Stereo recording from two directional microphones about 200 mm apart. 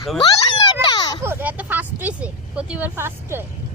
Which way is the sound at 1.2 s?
10° right (ahead or behind).